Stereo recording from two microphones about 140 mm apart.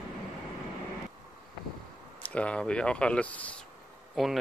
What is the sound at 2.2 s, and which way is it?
Speech, 10° left (ahead or behind).